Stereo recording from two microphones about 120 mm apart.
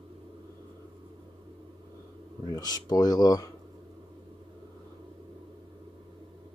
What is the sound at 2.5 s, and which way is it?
Speech, 35° left (ahead or behind).